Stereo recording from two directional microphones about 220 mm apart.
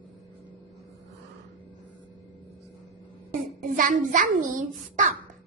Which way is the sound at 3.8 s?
35° right (ahead or behind).